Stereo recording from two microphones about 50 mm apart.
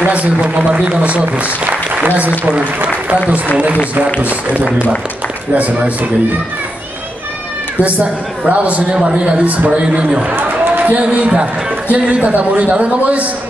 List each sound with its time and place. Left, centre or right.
0.0 s a man's voice: right
7.8 s a man's voice: right
10.3 s a sound: right
10.8 s a man's voice: right